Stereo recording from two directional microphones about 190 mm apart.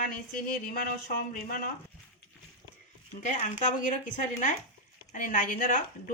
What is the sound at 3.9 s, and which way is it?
Speech, 40° left (ahead or behind).